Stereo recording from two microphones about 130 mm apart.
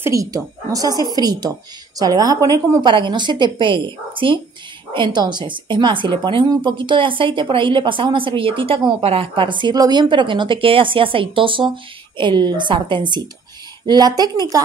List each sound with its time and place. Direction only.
0.0 s speech: 25° right (ahead or behind)
2.9 s speech: 40° right (ahead or behind)